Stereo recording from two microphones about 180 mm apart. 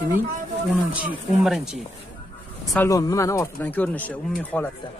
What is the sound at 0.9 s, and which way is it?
Speech, 5° right (ahead or behind).